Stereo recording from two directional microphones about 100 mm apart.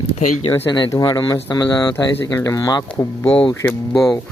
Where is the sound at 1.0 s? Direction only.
50° left (ahead or behind).